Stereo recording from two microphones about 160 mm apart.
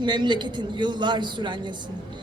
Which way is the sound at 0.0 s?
30° right (ahead or behind).